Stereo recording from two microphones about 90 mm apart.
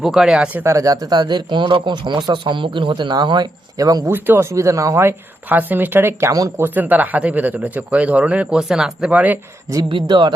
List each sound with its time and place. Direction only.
0.0 s speech: 5° right (ahead or behind)
0.6 s speech: 35° right (ahead or behind)
4.1 s speech: 25° right (ahead or behind)
4.5 s speech: 35° right (ahead or behind)
6.6 s speech: 20° right (ahead or behind)
9.9 s speech: 60° right (ahead or behind)